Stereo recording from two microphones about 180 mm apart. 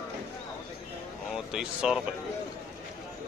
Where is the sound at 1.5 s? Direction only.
5° right (ahead or behind).